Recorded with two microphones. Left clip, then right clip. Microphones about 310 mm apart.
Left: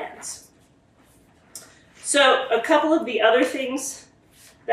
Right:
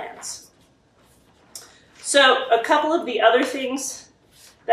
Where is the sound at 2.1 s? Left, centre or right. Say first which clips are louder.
Right 2 dB; centre.